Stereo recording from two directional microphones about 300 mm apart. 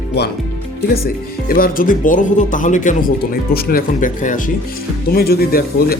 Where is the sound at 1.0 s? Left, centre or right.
Left.